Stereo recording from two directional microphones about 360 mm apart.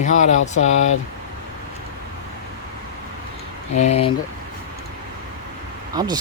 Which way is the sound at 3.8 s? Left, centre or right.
Centre.